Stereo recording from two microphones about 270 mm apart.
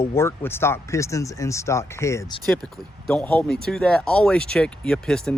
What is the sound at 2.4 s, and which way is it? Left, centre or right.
Speech, centre.